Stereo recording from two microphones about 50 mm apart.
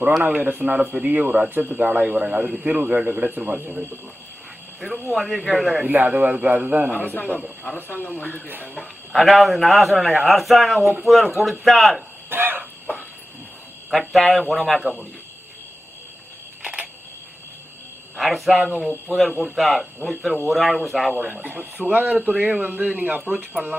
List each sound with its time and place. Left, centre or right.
0.6 s speech: centre
0.9 s speech: right
3.5 s speech: centre
4.8 s speech: centre
5.8 s speech: right
6.9 s speech: left
9.1 s speech: centre
12.3 s chicken: right
13.9 s speech: centre
18.2 s speech: centre
21.4 s speech: right